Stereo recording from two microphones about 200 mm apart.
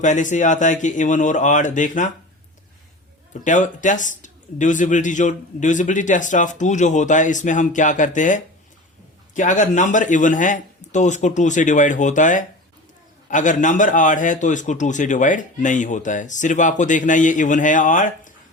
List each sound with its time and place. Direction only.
0.0 s a man's voice: 40° left (ahead or behind)
3.4 s a man's voice: 40° left (ahead or behind)